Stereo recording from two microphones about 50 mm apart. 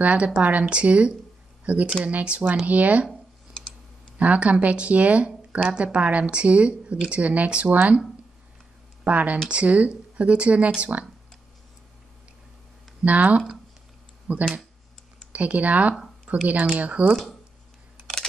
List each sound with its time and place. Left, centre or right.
0.0 s speech: right
4.2 s speech: right
9.0 s speech: right
13.0 s speech: right